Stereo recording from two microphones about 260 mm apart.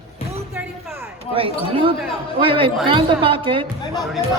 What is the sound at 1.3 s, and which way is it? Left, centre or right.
A woman's voice, centre.